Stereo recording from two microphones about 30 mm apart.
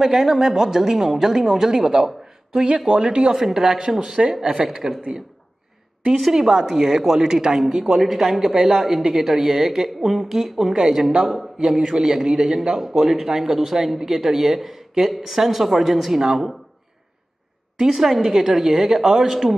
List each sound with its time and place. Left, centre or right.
0.0 s a woman's voice: centre; by 3.3 s right
3.3 s a woman's voice: centre
6.3 s a woman's voice: centre
8.0 s a woman's voice: centre; by 12.2 s right
12.2 s speech: centre
16.2 s a woman's voice: right
17.9 s speech: centre